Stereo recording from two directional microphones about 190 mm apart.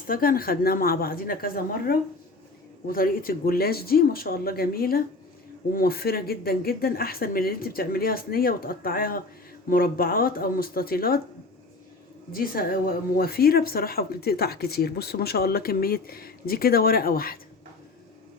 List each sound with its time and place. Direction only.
0.1 s speech: 50° left (ahead or behind)
12.3 s speech: 50° left (ahead or behind)